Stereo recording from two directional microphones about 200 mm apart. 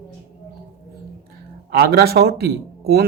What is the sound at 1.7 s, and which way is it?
Speech, 50° right (ahead or behind).